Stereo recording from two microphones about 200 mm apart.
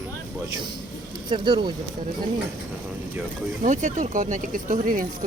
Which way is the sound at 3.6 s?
40° right (ahead or behind).